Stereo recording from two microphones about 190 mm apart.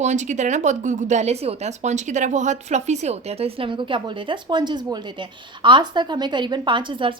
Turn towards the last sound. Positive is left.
turn(degrees=-25)  # may be behind; listen again after turning